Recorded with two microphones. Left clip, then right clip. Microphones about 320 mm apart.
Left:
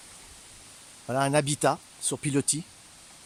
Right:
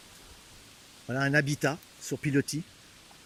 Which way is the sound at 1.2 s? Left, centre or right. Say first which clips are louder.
Left 2 dB; centre.